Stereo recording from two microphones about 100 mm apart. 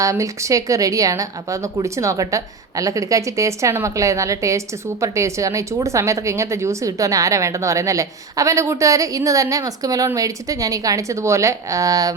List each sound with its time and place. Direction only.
0.0 s a woman's voice: 30° right (ahead or behind)